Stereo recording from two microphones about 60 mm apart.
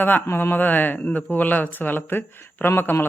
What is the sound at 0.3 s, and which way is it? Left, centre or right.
Speech, left.